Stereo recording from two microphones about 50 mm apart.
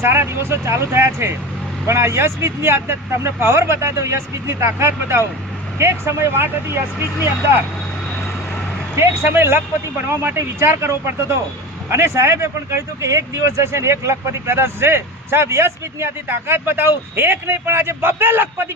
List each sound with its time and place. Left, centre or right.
0.0 s speech: right
9.0 s speech: right
14.5 s speech: right
16.5 s speech: right